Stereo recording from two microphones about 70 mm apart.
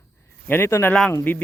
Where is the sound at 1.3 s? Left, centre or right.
Left.